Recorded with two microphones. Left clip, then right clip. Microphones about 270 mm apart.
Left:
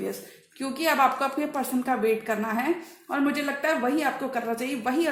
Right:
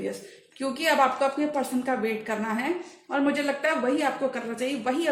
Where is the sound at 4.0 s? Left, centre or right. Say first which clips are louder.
Even; left.